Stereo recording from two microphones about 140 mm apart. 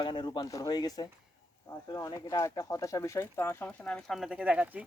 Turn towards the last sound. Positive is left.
turn(degrees=-10)  # may be behind; listen again after turning